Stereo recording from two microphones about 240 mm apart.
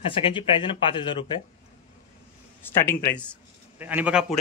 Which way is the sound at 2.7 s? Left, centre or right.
Centre.